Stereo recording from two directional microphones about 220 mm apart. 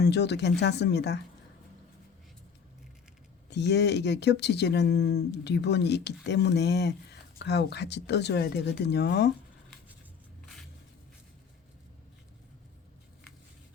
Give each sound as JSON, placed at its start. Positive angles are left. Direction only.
{"t": 0.0, "sound": "speech", "side_deg": 50}
{"t": 3.5, "sound": "speech", "side_deg": 50}